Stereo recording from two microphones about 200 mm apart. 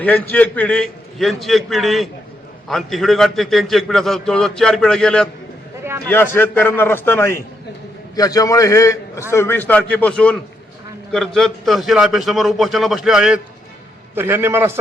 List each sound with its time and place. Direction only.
0.0 s a man's voice: 10° left (ahead or behind); by 14.8 s 10° right (ahead or behind)